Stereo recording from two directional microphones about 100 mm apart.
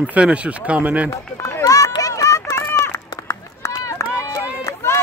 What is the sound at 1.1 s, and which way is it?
Run, 35° left (ahead or behind).